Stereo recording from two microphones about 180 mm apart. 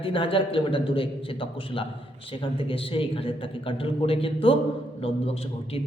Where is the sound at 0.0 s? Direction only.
30° left (ahead or behind).